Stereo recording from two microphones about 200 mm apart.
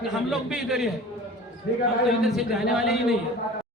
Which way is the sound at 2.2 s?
Centre (ahead or behind).